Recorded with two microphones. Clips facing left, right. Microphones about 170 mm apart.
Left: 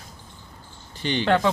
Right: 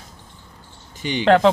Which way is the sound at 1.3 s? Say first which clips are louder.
Right 7 dB; 70° right (ahead or behind).